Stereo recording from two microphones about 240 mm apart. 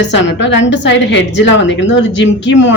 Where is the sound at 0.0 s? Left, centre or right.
Left.